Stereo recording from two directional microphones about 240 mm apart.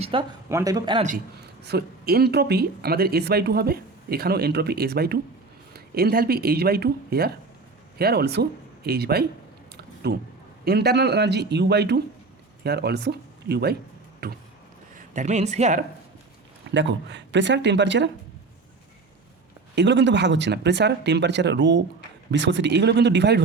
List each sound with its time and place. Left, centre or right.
0.0 s speech: right
1.6 s speech: right
9.7 s a sound: right
10.7 s speech: right
14.9 s speech: right
16.7 s speech: right
19.7 s speech: right